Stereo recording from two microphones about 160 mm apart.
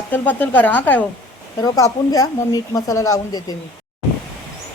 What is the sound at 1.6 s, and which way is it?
Speech, 20° left (ahead or behind).